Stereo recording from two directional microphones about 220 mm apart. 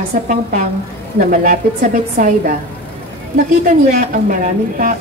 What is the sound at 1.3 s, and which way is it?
Speech, 40° right (ahead or behind).